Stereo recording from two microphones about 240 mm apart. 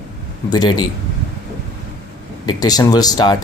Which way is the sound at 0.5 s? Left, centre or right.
Centre.